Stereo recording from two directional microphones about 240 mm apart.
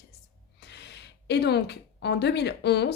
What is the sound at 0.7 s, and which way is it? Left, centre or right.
A woman's voice, left.